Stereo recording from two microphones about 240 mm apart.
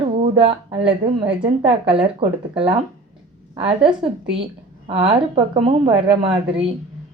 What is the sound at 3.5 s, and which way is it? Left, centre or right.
Speech, right.